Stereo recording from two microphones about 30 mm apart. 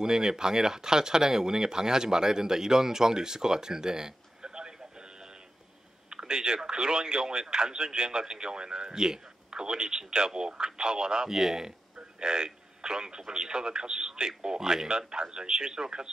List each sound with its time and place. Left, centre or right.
0.0 s speech: right